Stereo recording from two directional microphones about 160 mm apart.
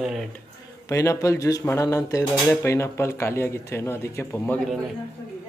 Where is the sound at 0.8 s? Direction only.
20° left (ahead or behind).